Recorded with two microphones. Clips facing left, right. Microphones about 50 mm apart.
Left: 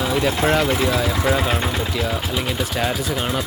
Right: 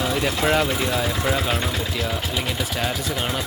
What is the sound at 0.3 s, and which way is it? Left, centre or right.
Speech, left.